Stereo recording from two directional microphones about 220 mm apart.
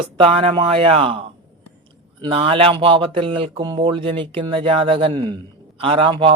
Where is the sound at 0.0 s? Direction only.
25° right (ahead or behind).